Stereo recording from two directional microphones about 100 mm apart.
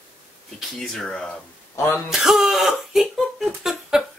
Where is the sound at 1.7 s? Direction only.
25° left (ahead or behind).